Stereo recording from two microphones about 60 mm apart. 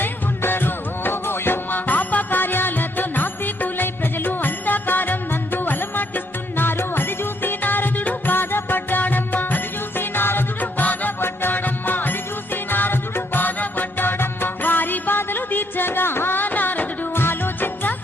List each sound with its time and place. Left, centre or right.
0.0 s music: left